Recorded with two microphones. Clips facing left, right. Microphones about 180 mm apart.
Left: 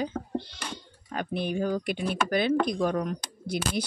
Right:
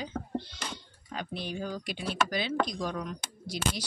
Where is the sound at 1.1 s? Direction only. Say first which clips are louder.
Left 7 dB; 55° left (ahead or behind).